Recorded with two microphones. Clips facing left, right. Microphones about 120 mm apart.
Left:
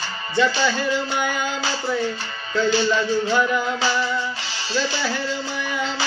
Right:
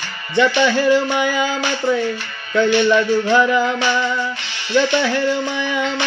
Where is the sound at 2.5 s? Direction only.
65° right (ahead or behind); by 4.0 s 80° right.